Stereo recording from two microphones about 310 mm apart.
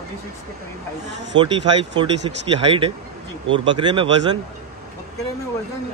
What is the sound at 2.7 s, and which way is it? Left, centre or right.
Speech, centre.